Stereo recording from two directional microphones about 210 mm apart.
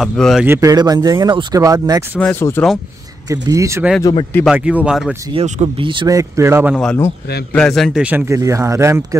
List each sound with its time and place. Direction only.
0.0 s a man's voice: centre (ahead or behind)
0.5 s speech: 15° right (ahead or behind)
2.1 s speech: 10° left (ahead or behind)
3.3 s speech: 15° right (ahead or behind)
4.0 s speech: 25° left (ahead or behind)
4.5 s a man's voice: 5° right (ahead or behind)
5.3 s speech: 30° right (ahead or behind)
6.7 s a man's voice: centre (ahead or behind)